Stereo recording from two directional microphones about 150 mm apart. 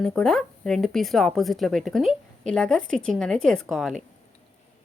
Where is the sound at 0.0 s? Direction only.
5° left (ahead or behind).